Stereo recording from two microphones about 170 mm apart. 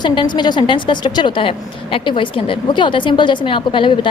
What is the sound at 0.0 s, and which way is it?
A woman's voice, 25° left (ahead or behind).